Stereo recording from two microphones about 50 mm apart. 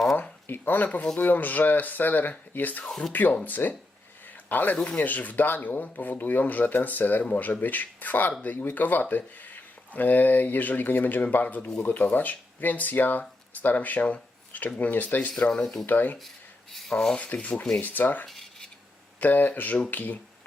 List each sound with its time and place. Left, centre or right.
0.2 s a sound: left
1.2 s speech: left
2.8 s speech: centre
3.1 s speech: left
15.3 s speech: centre
15.9 s speech: left
16.9 s speech: centre
17.2 s speech: left
18.3 s a sound: centre
19.2 s speech: left